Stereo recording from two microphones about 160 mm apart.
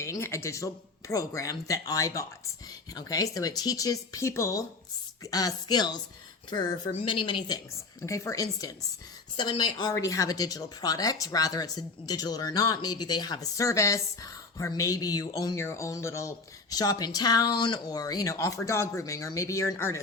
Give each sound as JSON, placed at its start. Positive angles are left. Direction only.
{"t": 0.0, "sound": "a woman's voice", "side_deg": 15}